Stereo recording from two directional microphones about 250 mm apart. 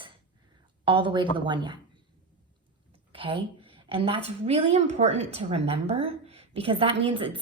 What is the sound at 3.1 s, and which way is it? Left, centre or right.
A woman's voice, centre.